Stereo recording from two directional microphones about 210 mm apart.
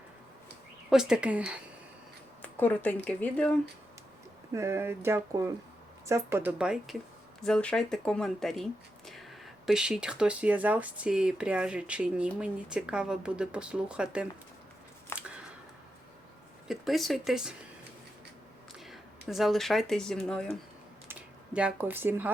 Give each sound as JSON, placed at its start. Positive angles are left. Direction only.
{"t": 0.9, "sound": "speech", "side_deg": -5}
{"t": 2.4, "sound": "speech", "side_deg": 10}
{"t": 4.5, "sound": "a sound", "side_deg": -15}
{"t": 7.4, "sound": "speech", "side_deg": 5}
{"t": 9.6, "sound": "speech", "side_deg": 0}
{"t": 16.6, "sound": "speech", "side_deg": 0}
{"t": 18.9, "sound": "speech", "side_deg": 0}
{"t": 21.1, "sound": "speech", "side_deg": -5}